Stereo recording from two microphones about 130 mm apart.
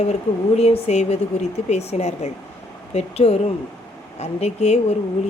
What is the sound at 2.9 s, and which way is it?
Speech, 50° left (ahead or behind).